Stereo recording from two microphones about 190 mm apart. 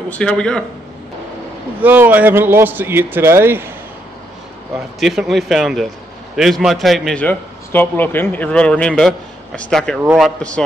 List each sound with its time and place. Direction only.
0.1 s a man's voice: 5° left (ahead or behind)
1.8 s a man's voice: 10° right (ahead or behind)
4.7 s a man's voice: centre (ahead or behind)